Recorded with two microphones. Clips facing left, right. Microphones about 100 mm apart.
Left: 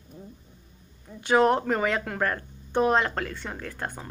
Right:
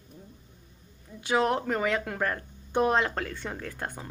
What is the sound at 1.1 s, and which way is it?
Speech, 50° left (ahead or behind).